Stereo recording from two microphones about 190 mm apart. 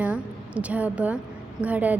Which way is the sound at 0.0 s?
5° right (ahead or behind).